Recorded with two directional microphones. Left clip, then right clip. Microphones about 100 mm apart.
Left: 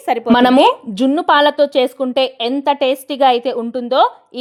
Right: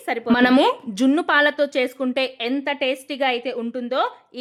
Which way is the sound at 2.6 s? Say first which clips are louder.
Left 10 dB; 55° left (ahead or behind).